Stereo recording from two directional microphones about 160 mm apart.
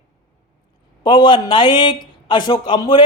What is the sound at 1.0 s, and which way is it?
A man's voice, 30° left (ahead or behind).